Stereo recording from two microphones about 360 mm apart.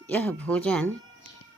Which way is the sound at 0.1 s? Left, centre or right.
Centre.